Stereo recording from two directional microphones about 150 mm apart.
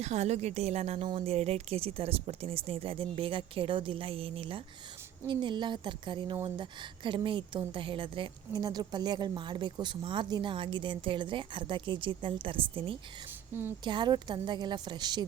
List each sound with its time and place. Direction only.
0.0 s a woman's voice: 50° right (ahead or behind)
13.5 s a woman's voice: 15° right (ahead or behind)
13.8 s a woman's voice: 30° right (ahead or behind)